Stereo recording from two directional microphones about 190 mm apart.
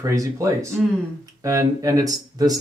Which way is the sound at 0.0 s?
20° right (ahead or behind).